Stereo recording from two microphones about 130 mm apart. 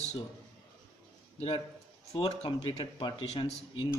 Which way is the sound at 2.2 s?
45° left (ahead or behind).